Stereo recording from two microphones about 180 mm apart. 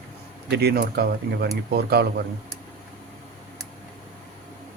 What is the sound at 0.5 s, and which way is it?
Speech, 60° right (ahead or behind).